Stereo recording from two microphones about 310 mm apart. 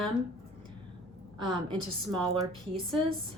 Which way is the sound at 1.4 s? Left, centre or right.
Right.